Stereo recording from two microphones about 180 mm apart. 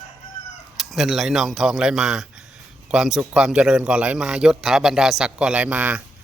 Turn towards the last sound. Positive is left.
turn(degrees=-5)  # may be behind; listen again after turning